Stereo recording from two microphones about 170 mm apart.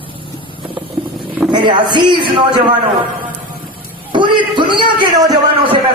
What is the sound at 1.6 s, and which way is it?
Speech, 25° right (ahead or behind).